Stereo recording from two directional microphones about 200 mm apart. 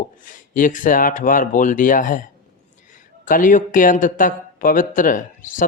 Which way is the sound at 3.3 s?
40° left (ahead or behind).